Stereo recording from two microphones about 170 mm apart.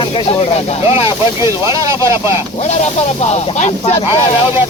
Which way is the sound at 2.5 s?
40° left (ahead or behind).